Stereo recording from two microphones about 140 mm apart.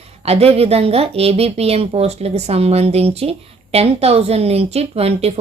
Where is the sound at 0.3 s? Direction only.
45° right (ahead or behind).